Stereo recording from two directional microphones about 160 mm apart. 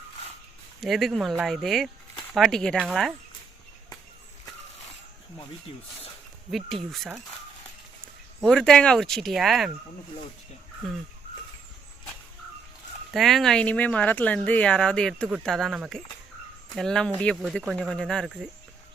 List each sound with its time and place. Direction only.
0.8 s speech: centre (ahead or behind)
6.9 s speech: centre (ahead or behind)
8.4 s speech: 5° left (ahead or behind)
13.1 s speech: centre (ahead or behind)